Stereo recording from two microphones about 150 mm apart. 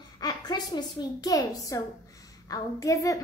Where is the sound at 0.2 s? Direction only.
25° left (ahead or behind).